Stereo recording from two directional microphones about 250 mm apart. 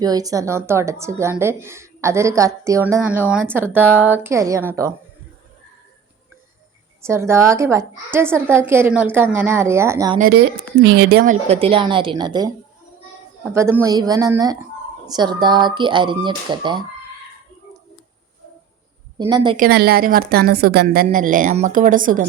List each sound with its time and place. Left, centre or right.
0.0 s a woman's voice: centre
7.0 s a woman's voice: centre
10.2 s a woman's voice: right; by 16.8 s centre
19.2 s a woman's voice: centre
19.5 s a woman's voice: right